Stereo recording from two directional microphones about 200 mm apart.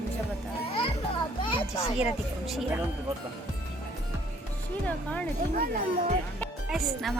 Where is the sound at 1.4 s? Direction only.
25° left (ahead or behind).